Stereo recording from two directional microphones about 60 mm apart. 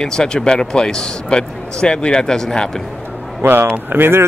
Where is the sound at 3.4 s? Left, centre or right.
Right.